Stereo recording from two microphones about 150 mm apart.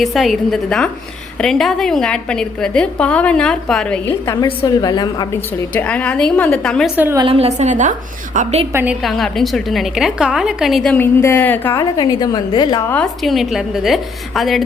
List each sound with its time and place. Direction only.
0.0 s a woman's voice: centre (ahead or behind)
4.6 s a woman's voice: 25° left (ahead or behind)
5.7 s a woman's voice: 10° left (ahead or behind)
6.9 s a woman's voice: 10° right (ahead or behind)
7.2 s a woman's voice: 40° right (ahead or behind); by 8.6 s 55° right (ahead or behind)
8.7 s a woman's voice: 10° right (ahead or behind)
9.0 s a woman's voice: centre (ahead or behind)
10.9 s a woman's voice: 15° left (ahead or behind)
11.8 s a woman's voice: 25° left (ahead or behind)
12.9 s a woman's voice: 5° left (ahead or behind)